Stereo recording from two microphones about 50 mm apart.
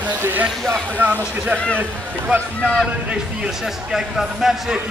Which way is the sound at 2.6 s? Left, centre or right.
Left.